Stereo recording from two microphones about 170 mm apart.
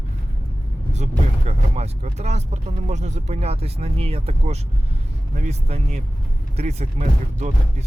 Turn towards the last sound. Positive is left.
turn(degrees=-40)  # may be behind; listen again after turning